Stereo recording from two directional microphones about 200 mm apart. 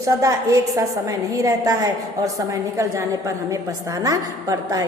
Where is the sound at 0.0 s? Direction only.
15° right (ahead or behind).